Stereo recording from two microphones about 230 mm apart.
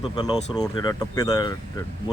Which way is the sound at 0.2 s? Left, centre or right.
Centre.